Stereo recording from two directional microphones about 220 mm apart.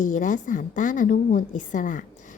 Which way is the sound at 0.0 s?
35° left (ahead or behind).